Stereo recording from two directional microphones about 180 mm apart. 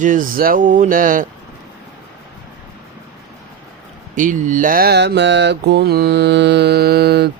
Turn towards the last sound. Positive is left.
turn(degrees=-60)  # may be behind; listen again after turning